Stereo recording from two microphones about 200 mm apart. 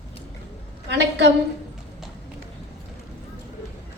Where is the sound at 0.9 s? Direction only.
60° right (ahead or behind).